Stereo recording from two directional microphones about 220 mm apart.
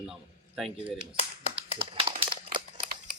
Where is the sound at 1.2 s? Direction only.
30° left (ahead or behind).